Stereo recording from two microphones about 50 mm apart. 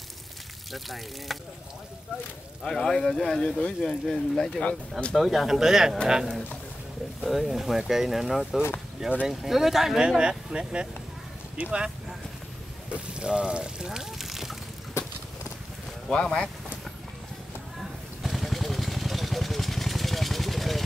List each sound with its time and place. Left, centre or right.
0.7 s speech: centre
2.6 s speech: centre
5.1 s speech: centre
7.2 s speech: centre
10.0 s speech: centre
12.9 s water: centre
16.1 s speech: centre
18.2 s vehicle: centre